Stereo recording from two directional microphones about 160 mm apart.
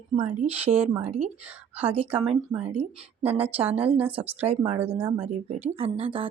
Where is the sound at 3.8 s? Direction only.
10° right (ahead or behind).